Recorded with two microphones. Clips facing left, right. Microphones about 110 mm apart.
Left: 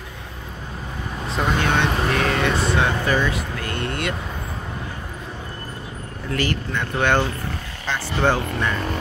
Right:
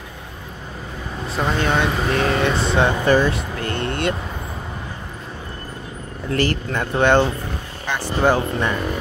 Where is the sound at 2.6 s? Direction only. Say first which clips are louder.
Right 3 dB; 25° right (ahead or behind).